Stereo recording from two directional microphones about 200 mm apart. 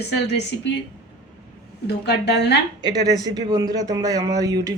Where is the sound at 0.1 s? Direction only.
60° left (ahead or behind).